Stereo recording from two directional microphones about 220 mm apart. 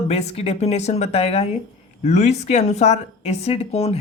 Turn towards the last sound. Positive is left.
turn(degrees=30)  # may be behind; listen again after turning